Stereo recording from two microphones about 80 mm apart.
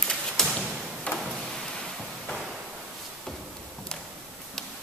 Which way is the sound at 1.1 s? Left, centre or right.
Centre.